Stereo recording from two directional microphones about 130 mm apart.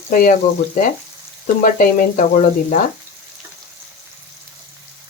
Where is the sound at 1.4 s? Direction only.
90° left.